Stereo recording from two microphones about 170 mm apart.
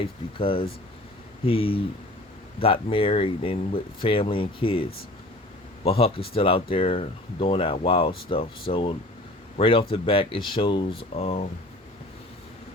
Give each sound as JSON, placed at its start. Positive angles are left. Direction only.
{"t": 0.3, "sound": "speech", "side_deg": 30}